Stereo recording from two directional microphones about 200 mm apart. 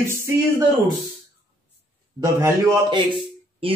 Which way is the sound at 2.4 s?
15° right (ahead or behind).